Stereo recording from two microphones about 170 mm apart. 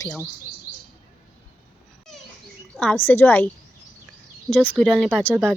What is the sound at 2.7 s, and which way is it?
A woman's voice, 5° left (ahead or behind).